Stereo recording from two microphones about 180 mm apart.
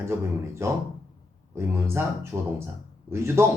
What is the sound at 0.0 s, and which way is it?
Speech, 15° right (ahead or behind).